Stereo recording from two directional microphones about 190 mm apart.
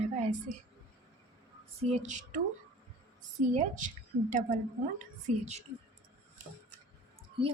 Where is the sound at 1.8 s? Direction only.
35° right (ahead or behind).